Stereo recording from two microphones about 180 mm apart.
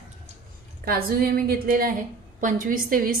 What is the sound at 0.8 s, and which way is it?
A woman's voice, 55° right (ahead or behind).